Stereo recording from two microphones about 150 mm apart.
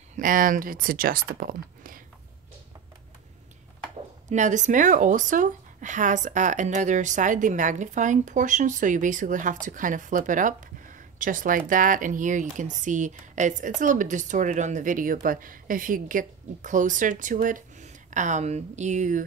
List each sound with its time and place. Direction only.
0.1 s speech: 65° right (ahead or behind)
4.3 s speech: 55° right (ahead or behind)